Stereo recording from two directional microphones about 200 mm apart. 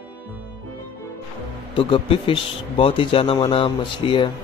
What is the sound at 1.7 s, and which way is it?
A man's voice, 25° left (ahead or behind).